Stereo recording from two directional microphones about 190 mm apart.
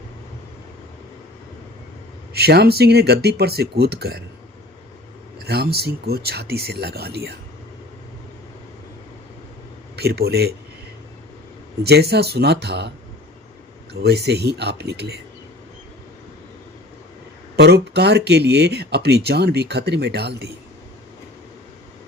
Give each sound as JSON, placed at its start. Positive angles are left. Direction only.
{"t": 2.3, "sound": "speech", "side_deg": -55}
{"t": 5.5, "sound": "speech", "side_deg": -55}
{"t": 9.9, "sound": "speech", "side_deg": -55}
{"t": 11.9, "sound": "speech", "side_deg": -60}
{"t": 14.0, "sound": "speech", "side_deg": -60}
{"t": 17.6, "sound": "speech", "side_deg": -60}